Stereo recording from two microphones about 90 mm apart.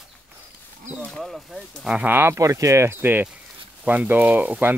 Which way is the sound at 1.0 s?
5° left (ahead or behind).